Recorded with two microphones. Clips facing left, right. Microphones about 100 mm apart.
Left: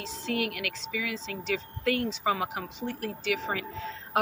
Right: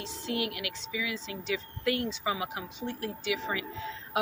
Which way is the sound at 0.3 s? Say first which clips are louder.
Left 2 dB; 50° left (ahead or behind).